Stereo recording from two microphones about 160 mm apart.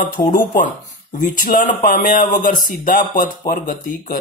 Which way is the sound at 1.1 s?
60° left (ahead or behind).